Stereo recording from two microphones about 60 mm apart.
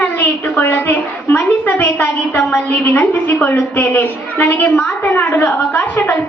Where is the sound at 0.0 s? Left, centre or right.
Left.